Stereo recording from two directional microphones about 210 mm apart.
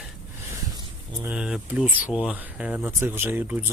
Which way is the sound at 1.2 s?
5° right (ahead or behind).